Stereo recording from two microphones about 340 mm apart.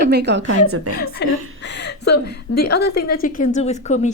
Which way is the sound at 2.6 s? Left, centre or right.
Left.